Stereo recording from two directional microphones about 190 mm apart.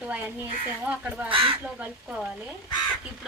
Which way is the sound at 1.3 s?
30° right (ahead or behind).